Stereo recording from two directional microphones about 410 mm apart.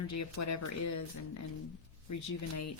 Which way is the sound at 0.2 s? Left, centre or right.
Left.